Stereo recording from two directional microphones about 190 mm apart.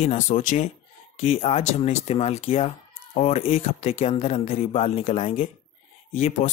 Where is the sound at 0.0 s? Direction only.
35° left (ahead or behind).